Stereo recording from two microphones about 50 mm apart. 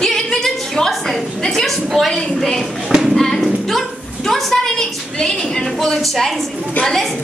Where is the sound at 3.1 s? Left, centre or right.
Centre.